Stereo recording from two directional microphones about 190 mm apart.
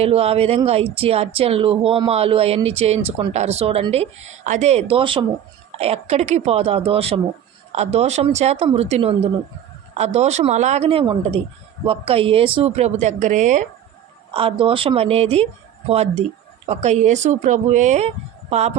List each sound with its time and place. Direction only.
0.0 s speech: 30° right (ahead or behind)
4.9 s speech: 30° right (ahead or behind)
14.3 s speech: 30° right (ahead or behind)
16.6 s speech: 35° right (ahead or behind)